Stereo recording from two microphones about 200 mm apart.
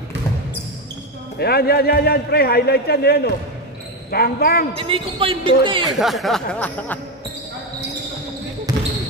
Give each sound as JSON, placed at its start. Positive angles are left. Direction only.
{"t": 1.4, "sound": "a man's voice", "side_deg": 50}
{"t": 4.7, "sound": "speech", "side_deg": -25}
{"t": 5.9, "sound": "speech", "side_deg": 0}